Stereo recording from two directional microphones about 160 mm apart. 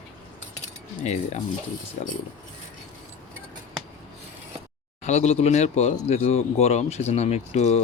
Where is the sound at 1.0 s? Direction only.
45° left (ahead or behind).